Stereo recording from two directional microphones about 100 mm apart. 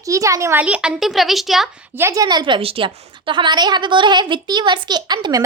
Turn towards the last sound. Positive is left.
turn(degrees=-45)  # may be behind; listen again after turning